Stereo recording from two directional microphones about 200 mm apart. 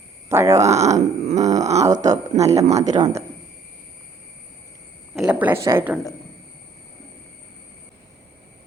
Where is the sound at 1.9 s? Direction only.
35° right (ahead or behind).